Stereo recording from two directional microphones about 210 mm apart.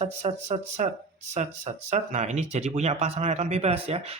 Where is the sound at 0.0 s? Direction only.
30° right (ahead or behind).